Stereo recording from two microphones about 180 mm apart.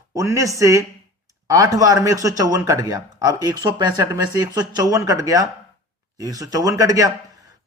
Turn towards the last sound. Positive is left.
turn(degrees=-20)  # may be behind; listen again after turning